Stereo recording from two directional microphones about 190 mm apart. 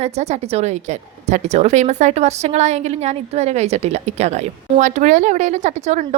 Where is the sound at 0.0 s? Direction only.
35° right (ahead or behind).